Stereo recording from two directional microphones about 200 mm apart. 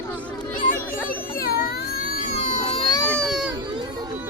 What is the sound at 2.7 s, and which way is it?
Baby cry, 30° left (ahead or behind).